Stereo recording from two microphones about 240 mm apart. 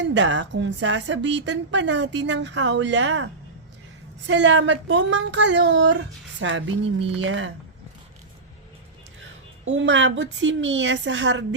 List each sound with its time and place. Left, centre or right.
0.0 s speech: right
4.3 s speech: right
9.7 s speech: right